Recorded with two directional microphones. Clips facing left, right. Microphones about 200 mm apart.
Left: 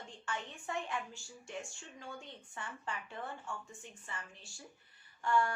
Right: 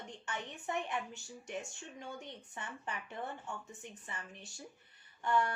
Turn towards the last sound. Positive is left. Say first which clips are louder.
# even
turn(degrees=-20)  # may be behind; listen again after turning